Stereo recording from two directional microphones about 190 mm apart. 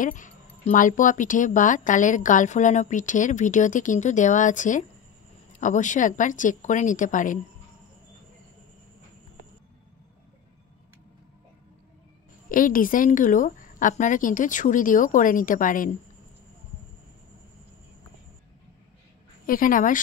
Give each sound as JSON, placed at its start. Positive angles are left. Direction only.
{"t": 0.0, "sound": "a woman's voice", "side_deg": 45}
{"t": 12.4, "sound": "a woman's voice", "side_deg": 45}
{"t": 19.4, "sound": "a woman's voice", "side_deg": 45}